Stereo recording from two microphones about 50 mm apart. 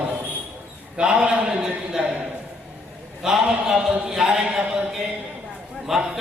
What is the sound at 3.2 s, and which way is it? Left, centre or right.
Speech, centre.